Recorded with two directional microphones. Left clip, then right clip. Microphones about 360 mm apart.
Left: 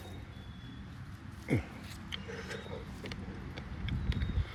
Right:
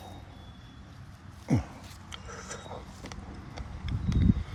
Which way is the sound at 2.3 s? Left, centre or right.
Centre.